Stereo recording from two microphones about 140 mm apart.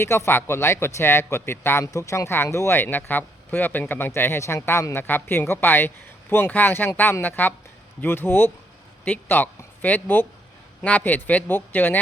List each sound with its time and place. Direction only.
0.0 s speech: 20° left (ahead or behind)